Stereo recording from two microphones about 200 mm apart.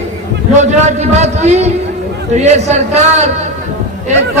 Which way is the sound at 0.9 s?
35° right (ahead or behind).